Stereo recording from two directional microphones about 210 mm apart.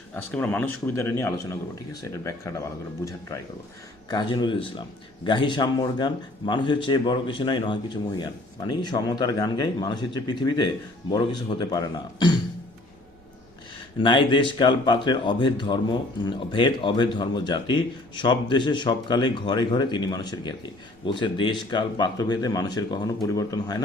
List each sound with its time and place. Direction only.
0.2 s speech: 5° left (ahead or behind)
4.1 s speech: 20° left (ahead or behind)
14.0 s speech: 20° left (ahead or behind)